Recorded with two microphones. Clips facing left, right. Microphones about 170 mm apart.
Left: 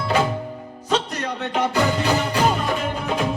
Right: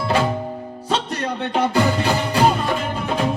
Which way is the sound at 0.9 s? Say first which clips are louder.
Even; 35° right (ahead or behind).